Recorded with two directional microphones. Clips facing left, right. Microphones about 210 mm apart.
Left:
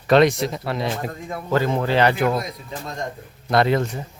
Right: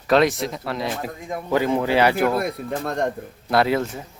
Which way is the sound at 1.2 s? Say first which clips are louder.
Right 1 dB; 15° right (ahead or behind).